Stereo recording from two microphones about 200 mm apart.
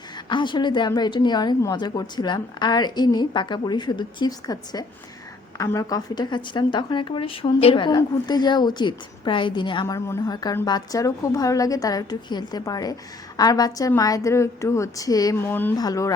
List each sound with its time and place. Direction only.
0.3 s a woman's voice: 25° left (ahead or behind)